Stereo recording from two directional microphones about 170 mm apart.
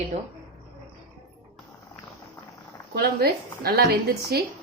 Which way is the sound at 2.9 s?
70° right (ahead or behind).